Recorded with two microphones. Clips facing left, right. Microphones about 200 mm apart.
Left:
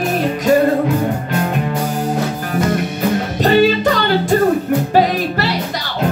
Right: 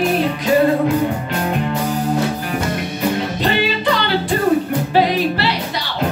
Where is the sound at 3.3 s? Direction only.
45° left (ahead or behind).